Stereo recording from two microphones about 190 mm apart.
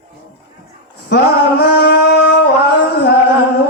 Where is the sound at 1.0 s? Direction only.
60° left (ahead or behind).